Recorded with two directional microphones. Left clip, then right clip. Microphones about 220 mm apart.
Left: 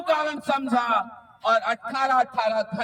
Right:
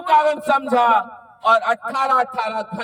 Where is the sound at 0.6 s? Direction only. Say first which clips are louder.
Right 7 dB; 35° right (ahead or behind).